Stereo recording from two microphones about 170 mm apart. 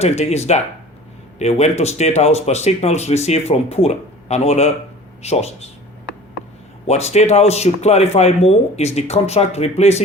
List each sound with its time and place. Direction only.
0.0 s speech: 40° left (ahead or behind)
6.8 s speech: 40° left (ahead or behind)